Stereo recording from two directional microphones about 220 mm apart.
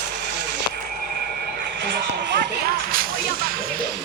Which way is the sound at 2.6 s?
40° right (ahead or behind).